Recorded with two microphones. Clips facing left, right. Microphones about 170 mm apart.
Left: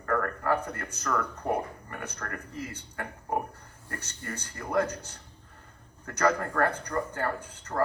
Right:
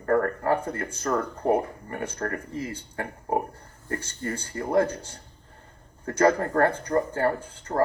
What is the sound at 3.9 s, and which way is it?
Speech, 30° right (ahead or behind).